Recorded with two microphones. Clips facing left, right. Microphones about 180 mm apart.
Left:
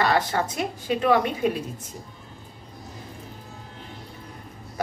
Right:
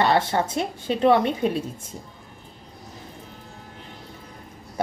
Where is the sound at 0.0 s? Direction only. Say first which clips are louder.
Right 2 dB; 30° right (ahead or behind).